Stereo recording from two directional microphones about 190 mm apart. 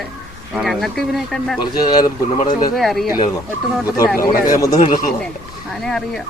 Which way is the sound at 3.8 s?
20° left (ahead or behind).